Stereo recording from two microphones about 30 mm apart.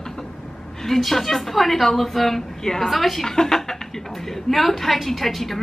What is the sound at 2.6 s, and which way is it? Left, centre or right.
Speech, centre.